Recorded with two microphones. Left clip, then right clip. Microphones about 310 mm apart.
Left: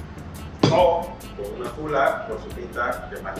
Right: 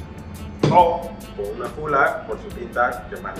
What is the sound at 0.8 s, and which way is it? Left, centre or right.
Speech, centre.